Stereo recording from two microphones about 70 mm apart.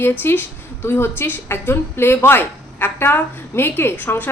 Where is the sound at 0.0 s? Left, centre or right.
Left.